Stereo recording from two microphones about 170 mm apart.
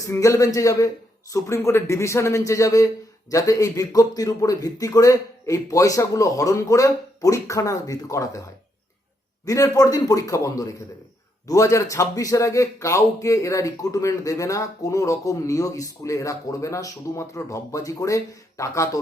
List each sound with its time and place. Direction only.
0.0 s a man's voice: 20° left (ahead or behind)
9.5 s a man's voice: 20° left (ahead or behind)